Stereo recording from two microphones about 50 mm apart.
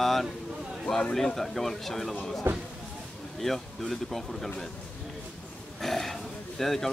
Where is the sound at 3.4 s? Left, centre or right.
Centre.